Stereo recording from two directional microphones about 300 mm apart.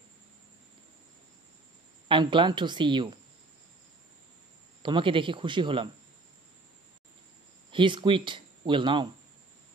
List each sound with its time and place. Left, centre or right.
2.0 s speech: centre
4.8 s speech: centre
7.7 s speech: centre